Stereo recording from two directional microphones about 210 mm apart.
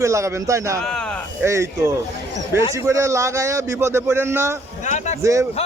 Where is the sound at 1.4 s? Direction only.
10° right (ahead or behind).